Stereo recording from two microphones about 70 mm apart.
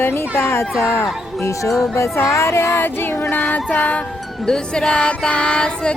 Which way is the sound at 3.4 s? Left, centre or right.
Left.